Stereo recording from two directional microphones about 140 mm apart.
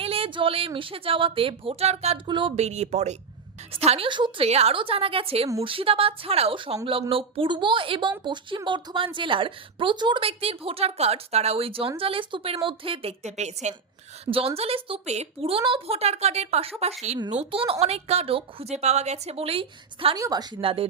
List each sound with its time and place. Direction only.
0.0 s a woman's voice: 40° right (ahead or behind)
2.2 s a woman's voice: 35° right (ahead or behind)
2.6 s a woman's voice: 50° right (ahead or behind)
4.4 s a woman's voice: 50° right (ahead or behind)
14.3 s a woman's voice: 40° right (ahead or behind)
20.1 s a woman's voice: 25° right (ahead or behind)